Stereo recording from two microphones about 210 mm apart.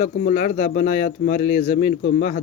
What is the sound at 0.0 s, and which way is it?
Speech, 35° left (ahead or behind).